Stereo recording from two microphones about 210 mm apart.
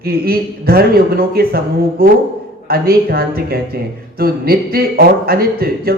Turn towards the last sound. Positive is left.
turn(degrees=-45)  # may be behind; listen again after turning